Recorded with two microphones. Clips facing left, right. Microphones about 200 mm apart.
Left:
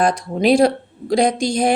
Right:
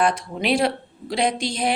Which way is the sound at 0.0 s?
40° left (ahead or behind).